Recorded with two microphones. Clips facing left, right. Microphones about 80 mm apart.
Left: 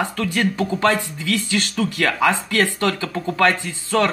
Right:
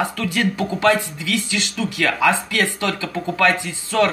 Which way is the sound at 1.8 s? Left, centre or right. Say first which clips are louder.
Even; left.